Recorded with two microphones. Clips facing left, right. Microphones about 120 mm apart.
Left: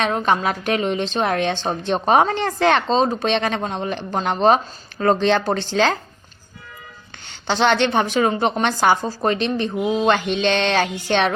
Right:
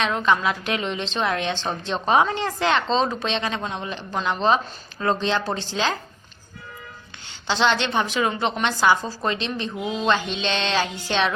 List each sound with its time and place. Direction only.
0.0 s a woman's voice: 45° left (ahead or behind); by 6.0 s 60° left (ahead or behind)
7.4 s a woman's voice: 50° left (ahead or behind)